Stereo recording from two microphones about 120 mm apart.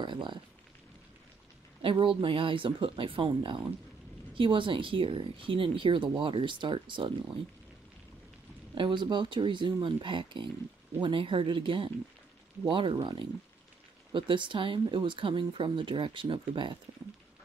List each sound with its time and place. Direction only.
0.0 s speech: 40° right (ahead or behind)
1.8 s speech: 50° right (ahead or behind)
8.7 s speech: 40° right (ahead or behind)